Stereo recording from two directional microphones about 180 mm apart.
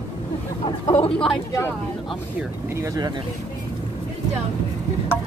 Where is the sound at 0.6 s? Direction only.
30° left (ahead or behind).